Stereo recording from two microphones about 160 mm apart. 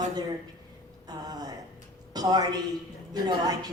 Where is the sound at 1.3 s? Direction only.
25° right (ahead or behind).